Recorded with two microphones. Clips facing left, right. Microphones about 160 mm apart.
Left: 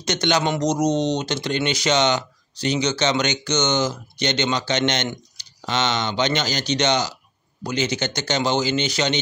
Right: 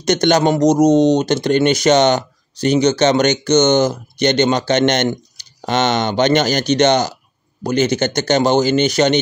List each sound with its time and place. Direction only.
0.0 s speech: 45° right (ahead or behind)